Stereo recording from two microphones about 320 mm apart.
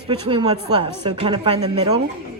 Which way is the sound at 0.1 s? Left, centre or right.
Centre.